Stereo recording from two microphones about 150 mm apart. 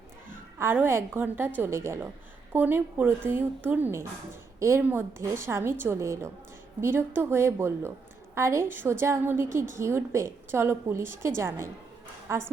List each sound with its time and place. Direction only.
0.6 s a woman's voice: 15° right (ahead or behind)